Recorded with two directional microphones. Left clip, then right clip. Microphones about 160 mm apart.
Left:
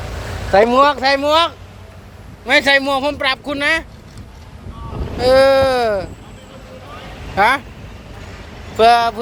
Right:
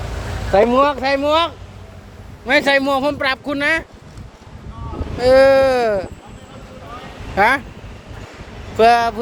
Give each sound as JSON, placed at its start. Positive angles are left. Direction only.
{"t": 0.5, "sound": "speech", "side_deg": -5}
{"t": 2.5, "sound": "a man's voice", "side_deg": -20}
{"t": 5.2, "sound": "a man's voice", "side_deg": -25}
{"t": 7.3, "sound": "a man's voice", "side_deg": -25}
{"t": 8.8, "sound": "a man's voice", "side_deg": -25}